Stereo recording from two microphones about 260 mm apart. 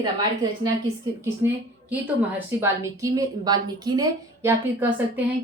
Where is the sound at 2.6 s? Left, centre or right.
Centre.